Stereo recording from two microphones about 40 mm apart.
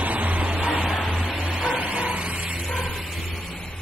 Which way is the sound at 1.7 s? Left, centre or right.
Right.